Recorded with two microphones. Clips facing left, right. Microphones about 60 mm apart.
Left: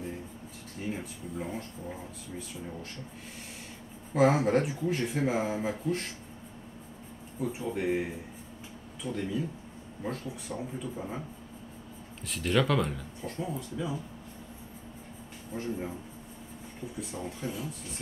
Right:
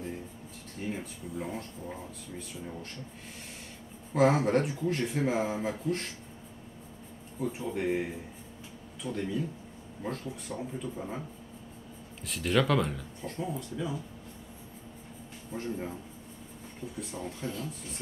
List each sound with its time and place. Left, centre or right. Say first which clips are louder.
0.7 s speech: even; centre
4.1 s speech: even; centre
7.3 s speech: even; centre
9.1 s speech: even; centre
12.3 s speech: even; centre
15.5 s speech: left 1 dB; centre
17.0 s speech: left 1 dB; centre